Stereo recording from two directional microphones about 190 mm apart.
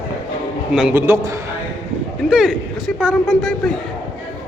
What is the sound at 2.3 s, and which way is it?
Speech, 5° right (ahead or behind).